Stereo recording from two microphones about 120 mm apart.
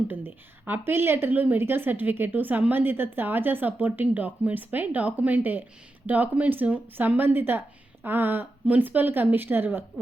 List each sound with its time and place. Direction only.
0.1 s a woman's voice: 15° right (ahead or behind)